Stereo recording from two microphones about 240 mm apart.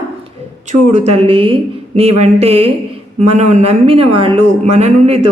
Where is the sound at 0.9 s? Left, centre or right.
Right.